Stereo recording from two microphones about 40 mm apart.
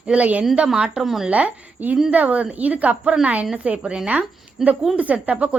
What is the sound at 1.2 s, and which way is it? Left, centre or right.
A woman's voice, right.